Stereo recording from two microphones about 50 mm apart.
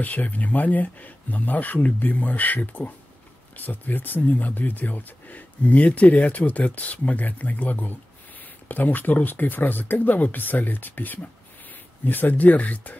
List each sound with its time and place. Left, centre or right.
0.0 s speech: left